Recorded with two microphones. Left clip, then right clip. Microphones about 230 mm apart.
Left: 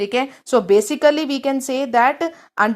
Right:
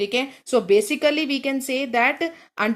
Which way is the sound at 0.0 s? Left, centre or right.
Centre.